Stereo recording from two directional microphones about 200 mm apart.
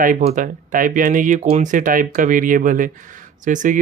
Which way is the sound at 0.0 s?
40° right (ahead or behind).